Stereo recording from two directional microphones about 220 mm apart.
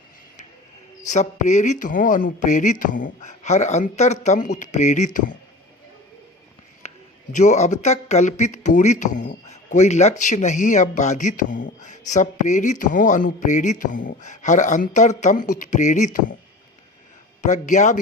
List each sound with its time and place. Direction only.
1.0 s a man's voice: 35° left (ahead or behind)
7.3 s a man's voice: 30° left (ahead or behind)
17.4 s a man's voice: 35° left (ahead or behind)